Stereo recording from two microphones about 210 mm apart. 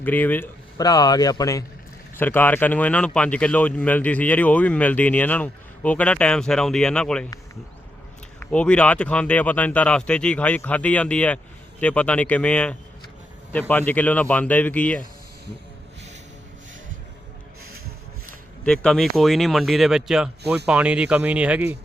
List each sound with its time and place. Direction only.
0.0 s speech: 10° left (ahead or behind)
8.4 s speech: 5° left (ahead or behind)
18.6 s speech: 5° left (ahead or behind)